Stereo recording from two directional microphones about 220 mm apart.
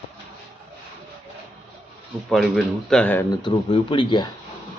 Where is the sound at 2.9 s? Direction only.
5° left (ahead or behind).